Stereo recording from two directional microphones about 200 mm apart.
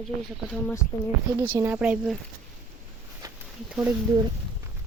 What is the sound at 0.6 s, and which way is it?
Speech, 15° left (ahead or behind).